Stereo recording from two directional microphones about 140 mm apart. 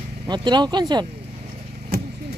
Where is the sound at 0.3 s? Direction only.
30° right (ahead or behind).